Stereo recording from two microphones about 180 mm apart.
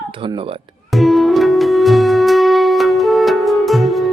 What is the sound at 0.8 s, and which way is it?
Music, centre (ahead or behind).